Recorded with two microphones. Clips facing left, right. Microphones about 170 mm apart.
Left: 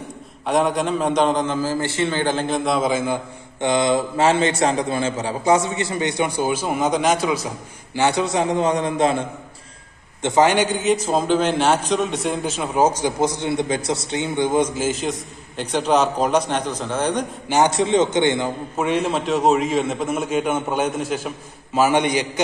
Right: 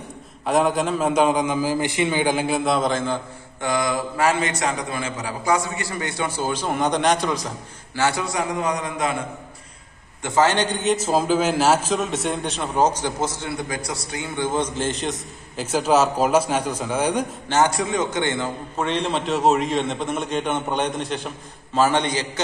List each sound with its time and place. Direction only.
0.5 s a man's voice: centre (ahead or behind)
3.6 s a man's voice: 25° left (ahead or behind); by 7.5 s 5° left (ahead or behind)
7.9 s a man's voice: 20° left (ahead or behind)
10.2 s a man's voice: 15° left (ahead or behind); by 17.3 s 10° right (ahead or behind)
17.5 s a man's voice: 20° left (ahead or behind)